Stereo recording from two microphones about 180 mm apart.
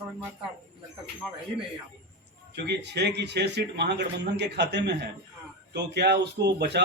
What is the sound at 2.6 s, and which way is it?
Speech, 65° right (ahead or behind).